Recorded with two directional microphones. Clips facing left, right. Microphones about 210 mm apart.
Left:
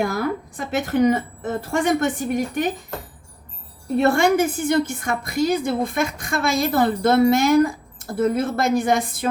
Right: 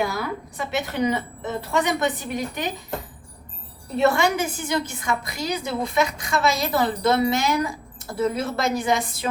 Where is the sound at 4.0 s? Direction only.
50° left (ahead or behind).